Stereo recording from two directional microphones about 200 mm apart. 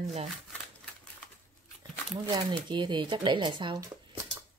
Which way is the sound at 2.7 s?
20° right (ahead or behind).